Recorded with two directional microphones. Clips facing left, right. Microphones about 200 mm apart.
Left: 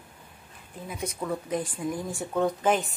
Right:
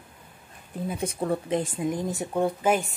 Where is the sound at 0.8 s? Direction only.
30° right (ahead or behind).